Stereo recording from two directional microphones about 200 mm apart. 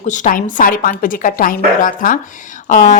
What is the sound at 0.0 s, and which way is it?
A woman's voice, 40° left (ahead or behind).